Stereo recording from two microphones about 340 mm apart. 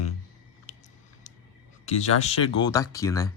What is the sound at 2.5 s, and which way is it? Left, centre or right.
Speech, centre.